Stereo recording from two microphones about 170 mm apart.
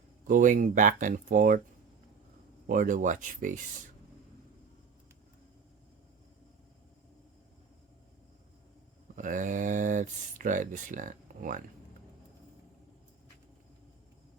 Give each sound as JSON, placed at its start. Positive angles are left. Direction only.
{"t": 0.3, "sound": "speech", "side_deg": -50}
{"t": 2.6, "sound": "speech", "side_deg": -50}
{"t": 9.1, "sound": "speech", "side_deg": -50}